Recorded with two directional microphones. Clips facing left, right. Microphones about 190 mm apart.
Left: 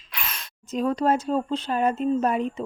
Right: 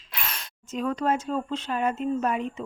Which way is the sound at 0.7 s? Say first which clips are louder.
Left 4 dB; 35° left (ahead or behind).